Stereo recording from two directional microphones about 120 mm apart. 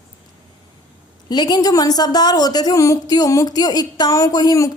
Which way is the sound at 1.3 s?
35° left (ahead or behind).